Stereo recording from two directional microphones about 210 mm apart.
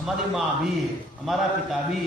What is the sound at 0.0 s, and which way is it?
Speech, centre (ahead or behind).